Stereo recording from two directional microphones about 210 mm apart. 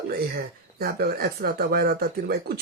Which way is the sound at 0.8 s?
45° right (ahead or behind).